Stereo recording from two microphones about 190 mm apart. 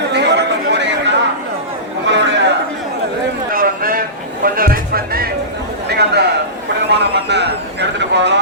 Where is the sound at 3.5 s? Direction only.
50° right (ahead or behind).